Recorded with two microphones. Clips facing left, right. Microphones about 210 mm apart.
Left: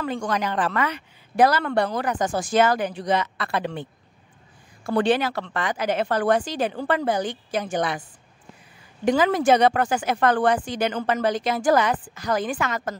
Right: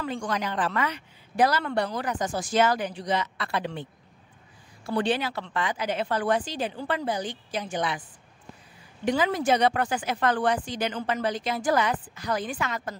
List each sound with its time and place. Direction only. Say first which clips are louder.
0.0 s a woman's voice: left 4 dB; 60° left (ahead or behind)
2.5 s a woman's voice: left 3 dB; 55° left (ahead or behind)
5.0 s a woman's voice: left 5 dB; 80° left; by 8.0 s 45° left (ahead or behind)
9.2 s speech: left 5 dB; 90° left
10.0 s a woman's voice: left 5 dB; 50° left (ahead or behind); by 12.9 s 90° left